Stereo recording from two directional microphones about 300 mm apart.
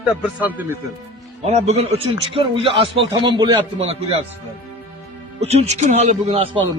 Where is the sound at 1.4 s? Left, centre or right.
Right.